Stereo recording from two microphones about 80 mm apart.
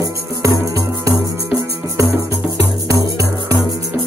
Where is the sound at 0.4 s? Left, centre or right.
Right.